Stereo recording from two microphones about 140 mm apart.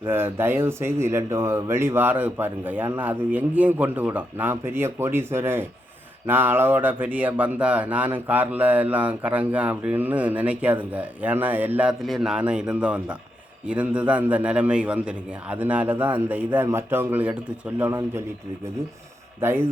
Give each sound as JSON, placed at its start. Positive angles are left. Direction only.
{"t": 0.0, "sound": "speech", "side_deg": -15}
{"t": 19.4, "sound": "speech", "side_deg": -15}